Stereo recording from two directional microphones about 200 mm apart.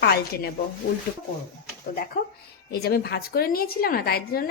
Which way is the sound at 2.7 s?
50° left (ahead or behind).